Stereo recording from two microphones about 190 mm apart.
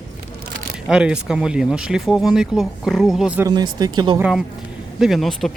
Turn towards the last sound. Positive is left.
turn(degrees=0)  # may be behind; listen again after turning